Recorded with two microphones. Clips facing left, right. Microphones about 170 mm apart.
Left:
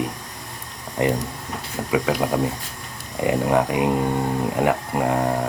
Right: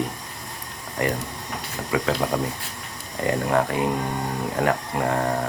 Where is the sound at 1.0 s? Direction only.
20° left (ahead or behind).